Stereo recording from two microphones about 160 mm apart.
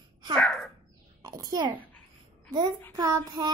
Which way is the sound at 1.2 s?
25° right (ahead or behind).